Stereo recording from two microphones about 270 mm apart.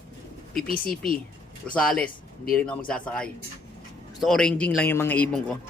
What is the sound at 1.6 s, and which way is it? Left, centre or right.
A man's voice, centre.